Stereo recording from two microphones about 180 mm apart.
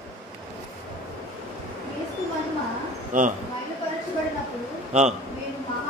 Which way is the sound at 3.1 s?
45° right (ahead or behind).